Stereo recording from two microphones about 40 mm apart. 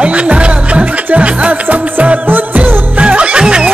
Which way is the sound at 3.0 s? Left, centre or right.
Right.